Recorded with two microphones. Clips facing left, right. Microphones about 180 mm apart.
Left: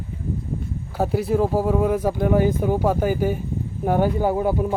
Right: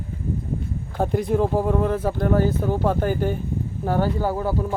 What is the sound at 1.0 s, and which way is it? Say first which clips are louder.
Speech: left 1 dB; 5° left (ahead or behind).